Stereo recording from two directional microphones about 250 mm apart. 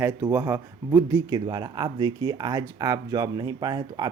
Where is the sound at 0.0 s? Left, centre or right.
Centre.